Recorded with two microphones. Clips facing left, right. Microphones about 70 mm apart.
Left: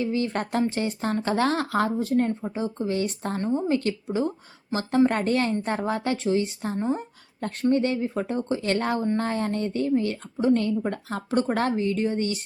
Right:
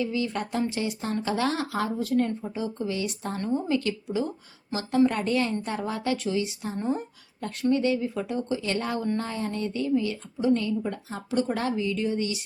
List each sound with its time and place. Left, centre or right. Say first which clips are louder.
0.0 s a woman's voice: left 2 dB; left
2.0 s speech: left 2 dB; left
6.7 s speech: left 1 dB; left
7.4 s a woman's voice: left 1 dB; left